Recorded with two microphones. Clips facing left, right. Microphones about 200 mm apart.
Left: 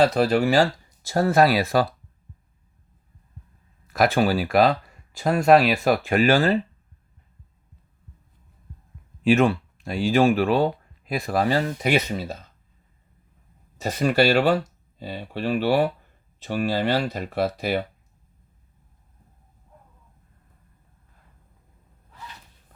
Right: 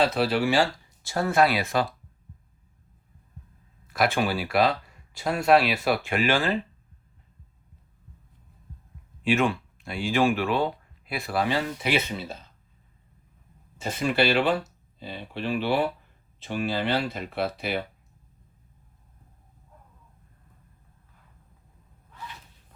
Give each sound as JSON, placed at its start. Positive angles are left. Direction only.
{"t": 0.0, "sound": "speech", "side_deg": 45}
{"t": 3.8, "sound": "speech", "side_deg": 40}
{"t": 9.2, "sound": "speech", "side_deg": 40}
{"t": 13.7, "sound": "speech", "side_deg": 40}